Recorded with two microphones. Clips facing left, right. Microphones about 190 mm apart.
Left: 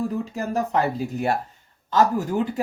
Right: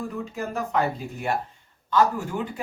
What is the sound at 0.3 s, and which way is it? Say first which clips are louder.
Speech: left 2 dB; 35° left (ahead or behind).